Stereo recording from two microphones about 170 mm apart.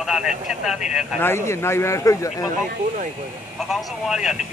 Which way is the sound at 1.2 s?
15° left (ahead or behind).